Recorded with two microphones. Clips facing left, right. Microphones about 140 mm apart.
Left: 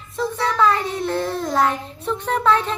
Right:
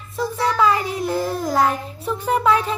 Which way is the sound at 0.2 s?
5° right (ahead or behind).